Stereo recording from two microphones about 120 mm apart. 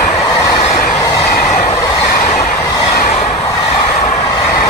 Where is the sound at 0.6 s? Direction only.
70° left (ahead or behind).